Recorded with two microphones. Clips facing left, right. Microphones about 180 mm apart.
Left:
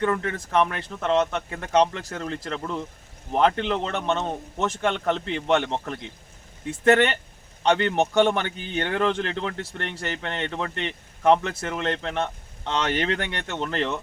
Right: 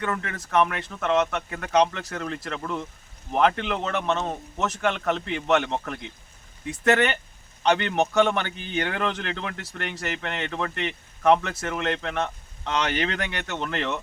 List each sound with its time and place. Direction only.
0.0 s a man's voice: 30° left (ahead or behind)
6.8 s a man's voice: 30° left (ahead or behind)